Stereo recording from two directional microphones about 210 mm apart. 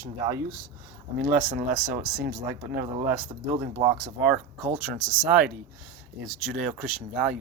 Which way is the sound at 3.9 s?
5° right (ahead or behind).